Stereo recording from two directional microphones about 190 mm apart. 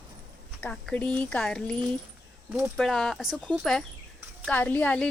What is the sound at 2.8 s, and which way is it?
Speech, 5° left (ahead or behind).